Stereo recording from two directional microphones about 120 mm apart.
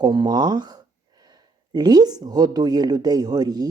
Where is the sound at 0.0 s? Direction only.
35° right (ahead or behind).